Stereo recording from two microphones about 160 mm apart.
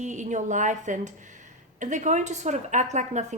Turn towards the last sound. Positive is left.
turn(degrees=-45)  # may be behind; listen again after turning